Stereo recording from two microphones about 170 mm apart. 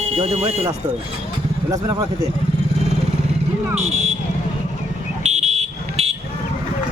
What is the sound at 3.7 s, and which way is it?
Vehicle, 40° right (ahead or behind).